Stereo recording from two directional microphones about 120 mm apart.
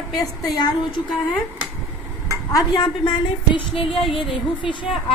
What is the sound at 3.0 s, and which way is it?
Music, 40° left (ahead or behind).